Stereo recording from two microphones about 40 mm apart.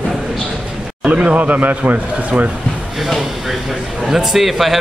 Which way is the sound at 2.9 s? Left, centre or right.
Centre.